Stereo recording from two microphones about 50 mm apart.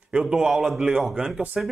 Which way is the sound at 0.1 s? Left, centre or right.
Centre.